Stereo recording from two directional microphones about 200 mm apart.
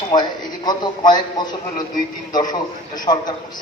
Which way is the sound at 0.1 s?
20° left (ahead or behind).